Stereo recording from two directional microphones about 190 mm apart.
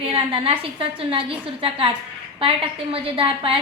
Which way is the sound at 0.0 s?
30° right (ahead or behind).